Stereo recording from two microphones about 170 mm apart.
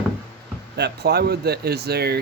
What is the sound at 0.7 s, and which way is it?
Speech, 75° right (ahead or behind).